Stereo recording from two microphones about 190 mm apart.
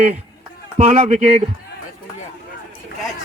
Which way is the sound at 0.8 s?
35° right (ahead or behind).